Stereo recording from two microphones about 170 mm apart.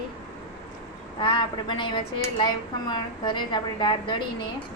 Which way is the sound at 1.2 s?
30° left (ahead or behind).